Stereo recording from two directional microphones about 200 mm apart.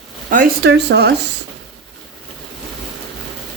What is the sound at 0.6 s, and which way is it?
Speech, 55° right (ahead or behind).